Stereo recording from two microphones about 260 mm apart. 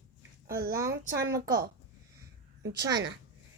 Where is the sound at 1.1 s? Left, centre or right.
Centre.